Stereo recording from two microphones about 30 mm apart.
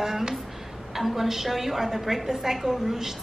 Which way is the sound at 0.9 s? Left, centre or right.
Centre.